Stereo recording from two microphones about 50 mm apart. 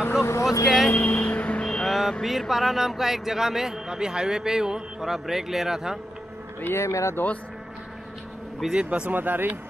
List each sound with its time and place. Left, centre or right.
0.2 s speech: left
0.9 s music: left
1.9 s vehicle: centre
2.2 s speech: centre
6.7 s speech: left
8.7 s speech: centre
9.1 s speech: right